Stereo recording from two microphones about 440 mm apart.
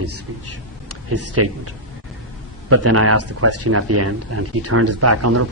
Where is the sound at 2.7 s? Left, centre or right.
Right.